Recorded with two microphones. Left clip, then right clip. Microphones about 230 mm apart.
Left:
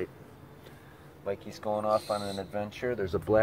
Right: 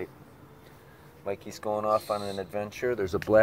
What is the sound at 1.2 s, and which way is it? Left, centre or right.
Speech, right.